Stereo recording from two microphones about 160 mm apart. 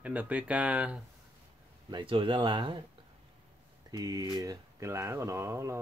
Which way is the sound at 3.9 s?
25° right (ahead or behind).